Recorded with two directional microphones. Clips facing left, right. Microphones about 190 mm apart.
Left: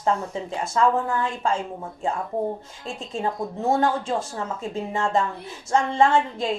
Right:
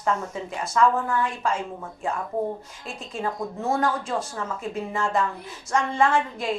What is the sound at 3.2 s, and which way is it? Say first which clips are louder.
Speech: left 2 dB; 25° left (ahead or behind).